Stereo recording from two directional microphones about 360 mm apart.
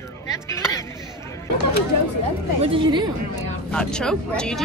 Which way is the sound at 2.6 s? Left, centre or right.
Centre.